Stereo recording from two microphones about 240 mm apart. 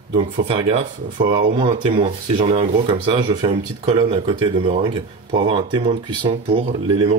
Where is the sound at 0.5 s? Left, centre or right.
Right.